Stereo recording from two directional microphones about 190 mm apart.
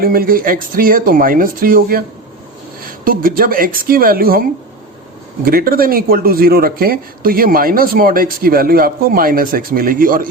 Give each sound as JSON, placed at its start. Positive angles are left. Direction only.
{"t": 0.0, "sound": "speech", "side_deg": -50}
{"t": 5.5, "sound": "speech", "side_deg": -50}